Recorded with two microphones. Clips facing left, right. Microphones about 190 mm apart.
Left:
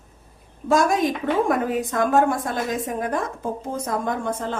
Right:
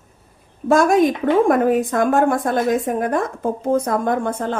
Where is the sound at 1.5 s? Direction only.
50° right (ahead or behind).